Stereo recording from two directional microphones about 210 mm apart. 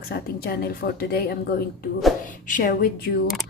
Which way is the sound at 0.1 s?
50° left (ahead or behind).